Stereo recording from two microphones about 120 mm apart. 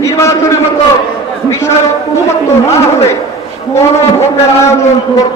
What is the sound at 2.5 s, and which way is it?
A man's voice, 25° left (ahead or behind).